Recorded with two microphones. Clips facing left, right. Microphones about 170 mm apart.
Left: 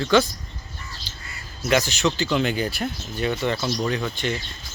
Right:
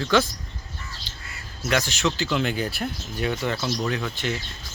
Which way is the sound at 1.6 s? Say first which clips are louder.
Left 3 dB; centre (ahead or behind).